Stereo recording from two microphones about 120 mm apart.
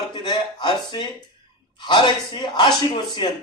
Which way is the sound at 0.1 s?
40° left (ahead or behind).